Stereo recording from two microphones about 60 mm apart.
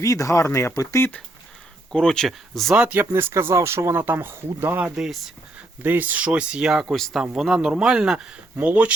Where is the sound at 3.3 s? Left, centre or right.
Right.